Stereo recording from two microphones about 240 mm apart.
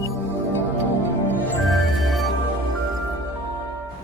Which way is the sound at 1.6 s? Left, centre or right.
Centre.